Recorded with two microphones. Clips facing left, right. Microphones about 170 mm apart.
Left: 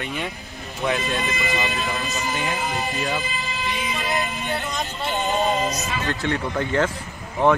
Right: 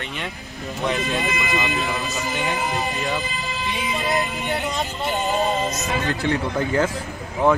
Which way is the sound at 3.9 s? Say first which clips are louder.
Right 5 dB; 20° right (ahead or behind).